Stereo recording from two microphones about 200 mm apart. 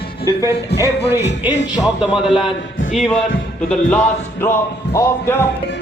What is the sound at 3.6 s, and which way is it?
Speech, 5° left (ahead or behind).